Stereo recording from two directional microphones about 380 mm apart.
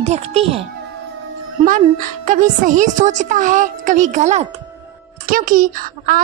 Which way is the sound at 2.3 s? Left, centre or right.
Centre.